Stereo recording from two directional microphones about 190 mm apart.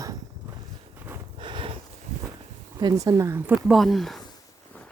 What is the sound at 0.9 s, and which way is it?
Snort, 10° right (ahead or behind).